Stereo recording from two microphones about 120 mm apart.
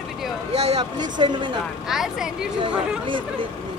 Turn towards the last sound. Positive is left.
turn(degrees=-45)  # may be behind; listen again after turning